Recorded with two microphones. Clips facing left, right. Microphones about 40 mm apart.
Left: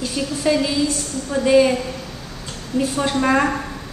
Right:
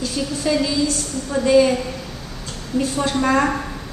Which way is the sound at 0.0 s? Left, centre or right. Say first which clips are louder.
Left 1 dB; centre.